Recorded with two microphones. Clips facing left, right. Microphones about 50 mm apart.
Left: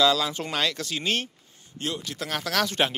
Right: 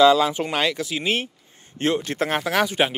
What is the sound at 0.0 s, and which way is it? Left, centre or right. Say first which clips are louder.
Speech: right 7 dB; right.